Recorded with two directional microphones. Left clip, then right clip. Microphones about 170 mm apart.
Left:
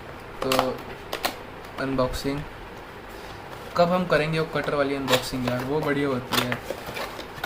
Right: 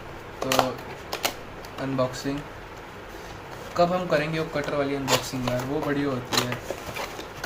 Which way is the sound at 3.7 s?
30° left (ahead or behind).